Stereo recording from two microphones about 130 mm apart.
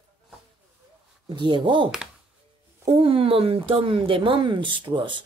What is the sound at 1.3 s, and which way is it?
Speech, 40° right (ahead or behind).